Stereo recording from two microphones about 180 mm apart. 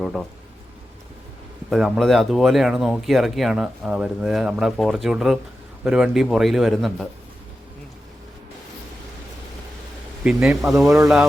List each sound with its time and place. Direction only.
0.0 s speech: centre (ahead or behind)
1.7 s speech: centre (ahead or behind)
10.2 s speech: 5° right (ahead or behind)
10.8 s speech: 15° right (ahead or behind)